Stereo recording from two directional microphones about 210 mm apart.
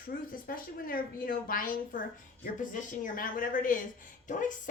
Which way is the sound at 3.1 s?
40° left (ahead or behind).